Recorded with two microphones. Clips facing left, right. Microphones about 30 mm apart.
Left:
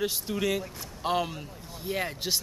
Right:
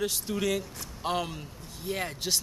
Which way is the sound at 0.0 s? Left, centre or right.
Centre.